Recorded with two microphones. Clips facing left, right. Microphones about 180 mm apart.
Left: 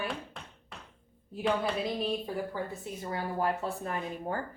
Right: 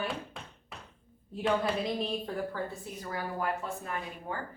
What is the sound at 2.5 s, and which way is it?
A woman's voice, 20° left (ahead or behind).